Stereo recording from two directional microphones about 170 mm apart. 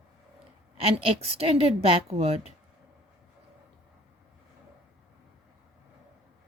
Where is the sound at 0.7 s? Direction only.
35° right (ahead or behind).